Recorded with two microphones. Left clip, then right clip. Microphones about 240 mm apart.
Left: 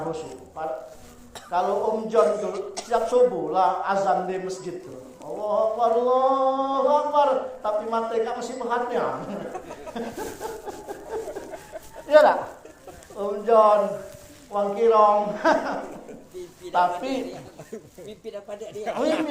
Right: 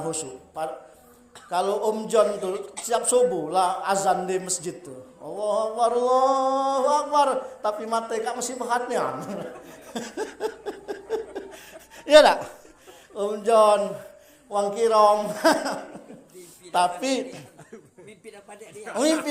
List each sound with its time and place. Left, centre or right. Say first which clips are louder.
0.1 s a man's voice: even; right
1.5 s chant: left 1 dB; right
9.9 s chuckle: right 1 dB; right
12.0 s chant: right 2 dB; right